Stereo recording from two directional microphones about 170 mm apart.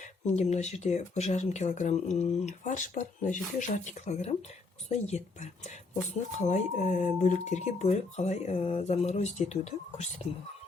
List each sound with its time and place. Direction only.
0.3 s speech: 40° left (ahead or behind)